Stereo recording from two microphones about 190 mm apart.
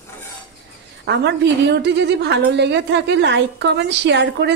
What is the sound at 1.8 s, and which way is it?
A woman's voice, 65° right (ahead or behind).